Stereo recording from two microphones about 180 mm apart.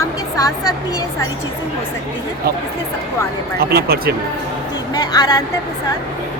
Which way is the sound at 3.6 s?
60° right (ahead or behind).